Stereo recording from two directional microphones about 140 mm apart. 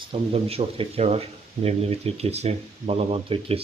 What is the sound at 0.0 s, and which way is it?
Speech, 40° right (ahead or behind).